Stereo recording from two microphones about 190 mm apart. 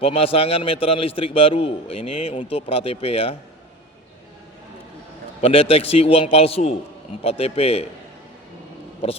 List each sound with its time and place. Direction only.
0.0 s a man's voice: 30° left (ahead or behind)
5.4 s a man's voice: 30° left (ahead or behind)